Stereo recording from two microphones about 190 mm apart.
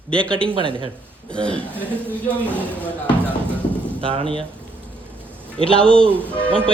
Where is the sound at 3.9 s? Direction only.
30° right (ahead or behind).